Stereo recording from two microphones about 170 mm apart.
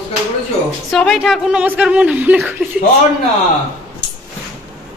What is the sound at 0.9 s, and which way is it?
Speech, centre (ahead or behind).